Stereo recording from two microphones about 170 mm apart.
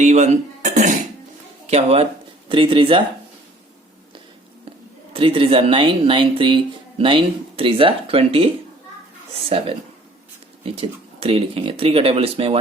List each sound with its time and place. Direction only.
0.0 s speech: 40° right (ahead or behind)
5.1 s speech: 30° right (ahead or behind)